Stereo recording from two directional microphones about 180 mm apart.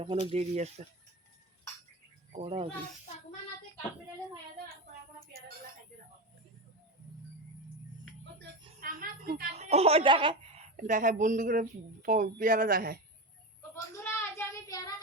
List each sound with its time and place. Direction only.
0.0 s speech: 30° right (ahead or behind)
2.3 s speech: 35° right (ahead or behind)
8.8 s a woman's voice: 50° right (ahead or behind)
9.6 s a woman's voice: 35° right (ahead or behind); by 13.0 s 55° right (ahead or behind)
13.6 s child singing: 15° left (ahead or behind)